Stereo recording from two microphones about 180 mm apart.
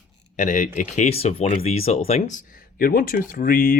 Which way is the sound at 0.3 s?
45° left (ahead or behind).